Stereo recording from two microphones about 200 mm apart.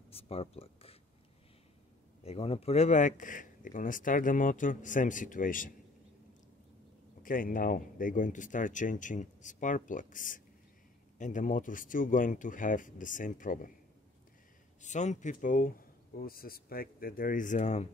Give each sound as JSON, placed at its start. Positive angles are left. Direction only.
{"t": 0.1, "sound": "a sound", "side_deg": 30}
{"t": 2.2, "sound": "speech", "side_deg": 30}
{"t": 7.2, "sound": "speech", "side_deg": 45}
{"t": 14.8, "sound": "speech", "side_deg": 35}